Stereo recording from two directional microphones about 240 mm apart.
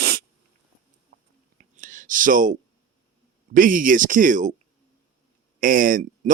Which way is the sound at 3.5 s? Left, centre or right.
Right.